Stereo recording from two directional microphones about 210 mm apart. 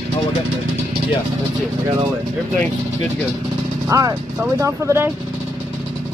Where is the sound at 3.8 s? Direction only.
15° right (ahead or behind).